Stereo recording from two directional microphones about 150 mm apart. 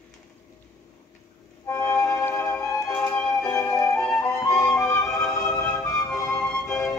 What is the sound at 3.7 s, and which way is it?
Flute, 20° left (ahead or behind).